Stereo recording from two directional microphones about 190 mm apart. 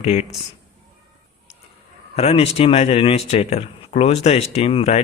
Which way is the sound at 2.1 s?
30° left (ahead or behind).